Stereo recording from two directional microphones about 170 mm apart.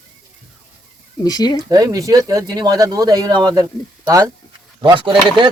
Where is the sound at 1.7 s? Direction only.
20° right (ahead or behind).